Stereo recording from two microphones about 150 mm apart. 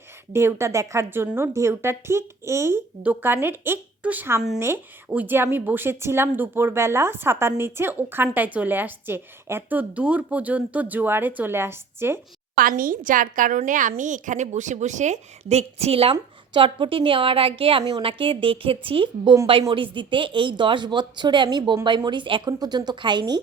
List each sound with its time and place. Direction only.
0.3 s a woman's voice: 15° right (ahead or behind)
12.5 s a woman's voice: 70° right (ahead or behind); by 23.4 s 30° right (ahead or behind)